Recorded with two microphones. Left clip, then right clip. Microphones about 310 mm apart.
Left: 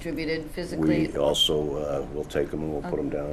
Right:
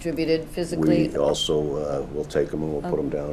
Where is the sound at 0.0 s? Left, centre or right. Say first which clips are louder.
Right 6 dB; right.